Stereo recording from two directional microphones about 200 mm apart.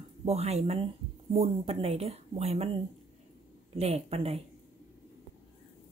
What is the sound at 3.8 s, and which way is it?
Speech, 30° right (ahead or behind).